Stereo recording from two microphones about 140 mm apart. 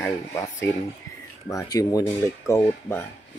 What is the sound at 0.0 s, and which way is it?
Speech, 20° left (ahead or behind).